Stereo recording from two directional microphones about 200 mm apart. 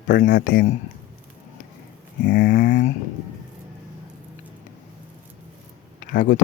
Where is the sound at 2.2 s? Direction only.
45° left (ahead or behind).